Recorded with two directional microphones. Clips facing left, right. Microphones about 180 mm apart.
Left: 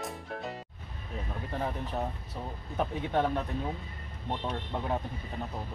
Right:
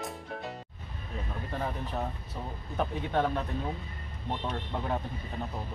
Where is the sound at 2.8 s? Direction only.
15° left (ahead or behind).